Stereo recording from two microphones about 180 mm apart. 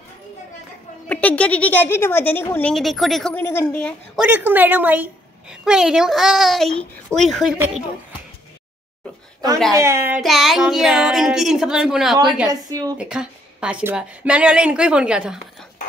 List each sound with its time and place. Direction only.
1.0 s a woman's voice: 10° left (ahead or behind)
2.7 s a woman's voice: centre (ahead or behind)
4.2 s a woman's voice: 10° right (ahead or behind)
9.7 s speech: 15° right (ahead or behind)
10.2 s a woman's voice: centre (ahead or behind)
12.4 s speech: 20° right (ahead or behind)
12.9 s a woman's voice: 5° right (ahead or behind)